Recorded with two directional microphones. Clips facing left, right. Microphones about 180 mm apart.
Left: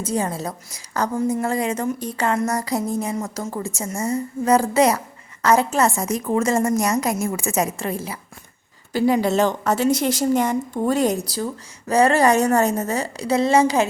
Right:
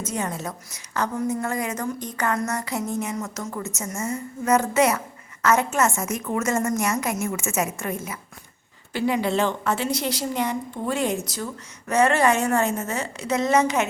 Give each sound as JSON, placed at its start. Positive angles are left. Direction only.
{"t": 0.0, "sound": "a woman's voice", "side_deg": 35}